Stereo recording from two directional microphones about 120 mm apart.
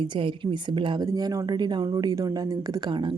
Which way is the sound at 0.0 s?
45° right (ahead or behind).